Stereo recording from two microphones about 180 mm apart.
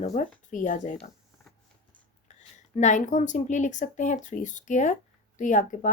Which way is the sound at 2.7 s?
45° left (ahead or behind).